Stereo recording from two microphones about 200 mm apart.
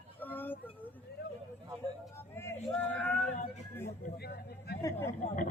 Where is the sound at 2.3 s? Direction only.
10° left (ahead or behind).